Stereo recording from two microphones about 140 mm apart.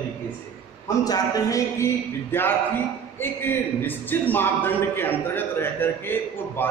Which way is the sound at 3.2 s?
15° left (ahead or behind).